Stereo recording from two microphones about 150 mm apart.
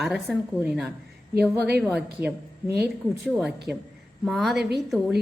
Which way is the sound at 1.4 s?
90° right.